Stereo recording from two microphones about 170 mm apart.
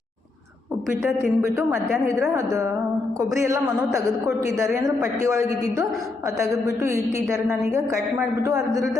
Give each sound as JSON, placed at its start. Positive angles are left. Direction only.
{"t": 1.0, "sound": "a woman's voice", "side_deg": -15}